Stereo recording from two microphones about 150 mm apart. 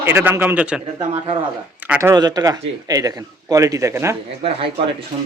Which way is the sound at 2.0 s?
25° right (ahead or behind).